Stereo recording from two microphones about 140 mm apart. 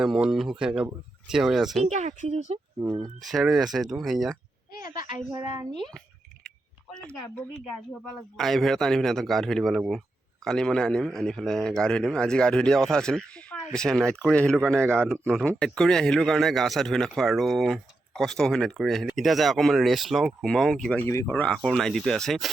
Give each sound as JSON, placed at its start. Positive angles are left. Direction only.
{"t": 0.0, "sound": "a man's voice", "side_deg": -5}
{"t": 1.9, "sound": "speech", "side_deg": -60}
{"t": 2.5, "sound": "speech", "side_deg": -50}
{"t": 2.9, "sound": "speech", "side_deg": -25}
{"t": 3.2, "sound": "a man's voice", "side_deg": -5}
{"t": 4.8, "sound": "a woman's voice", "side_deg": -25}
{"t": 5.7, "sound": "a man's voice", "side_deg": 5}
{"t": 21.1, "sound": "a man's voice", "side_deg": 15}